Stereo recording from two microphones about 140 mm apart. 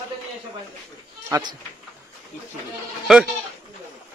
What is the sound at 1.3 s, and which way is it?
Speech, 30° right (ahead or behind).